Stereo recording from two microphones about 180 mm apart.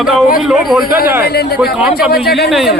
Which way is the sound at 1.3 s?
60° left (ahead or behind).